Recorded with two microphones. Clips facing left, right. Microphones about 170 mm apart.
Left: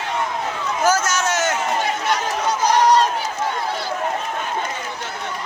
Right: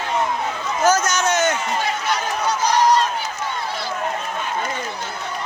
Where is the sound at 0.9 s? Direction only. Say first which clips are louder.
Right 2 dB; 5° left (ahead or behind).